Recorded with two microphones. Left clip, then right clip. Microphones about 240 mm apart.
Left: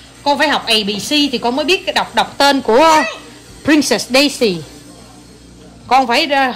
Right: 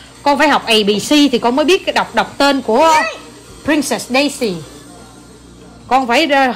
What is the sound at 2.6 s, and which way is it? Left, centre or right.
Speech, left.